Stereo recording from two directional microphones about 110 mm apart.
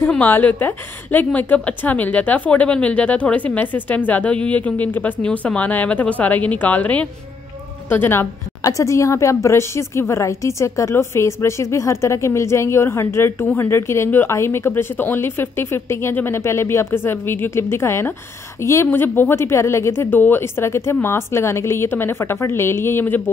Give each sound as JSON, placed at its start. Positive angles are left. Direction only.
{"t": 0.1, "sound": "a woman's voice", "side_deg": 15}